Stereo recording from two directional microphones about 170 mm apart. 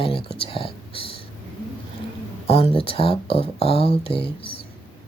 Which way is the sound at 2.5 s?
35° left (ahead or behind).